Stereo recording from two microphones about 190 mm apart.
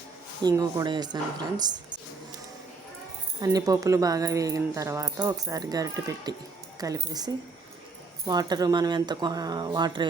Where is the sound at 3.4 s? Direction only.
20° right (ahead or behind).